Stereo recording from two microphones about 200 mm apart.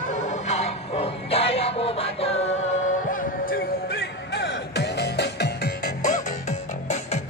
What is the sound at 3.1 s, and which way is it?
Music, 50° left (ahead or behind).